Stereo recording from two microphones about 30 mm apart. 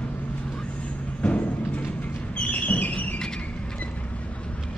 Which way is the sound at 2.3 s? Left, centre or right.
Left.